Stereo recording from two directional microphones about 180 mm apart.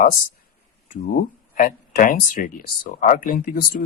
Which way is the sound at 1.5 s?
50° left (ahead or behind).